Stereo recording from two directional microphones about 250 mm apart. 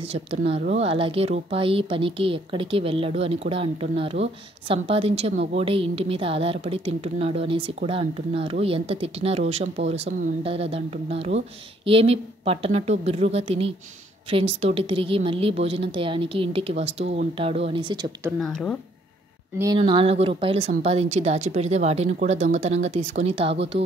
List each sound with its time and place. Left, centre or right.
0.0 s a woman's voice: right
18.4 s speech: centre
19.6 s a woman's voice: centre